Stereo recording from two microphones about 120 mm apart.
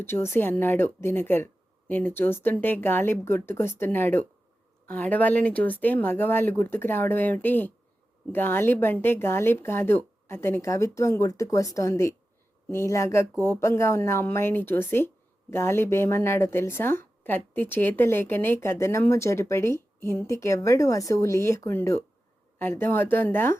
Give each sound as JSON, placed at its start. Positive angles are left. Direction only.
{"t": 0.0, "sound": "speech", "side_deg": 20}